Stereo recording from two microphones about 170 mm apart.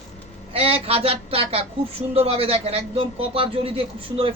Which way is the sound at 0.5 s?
35° right (ahead or behind).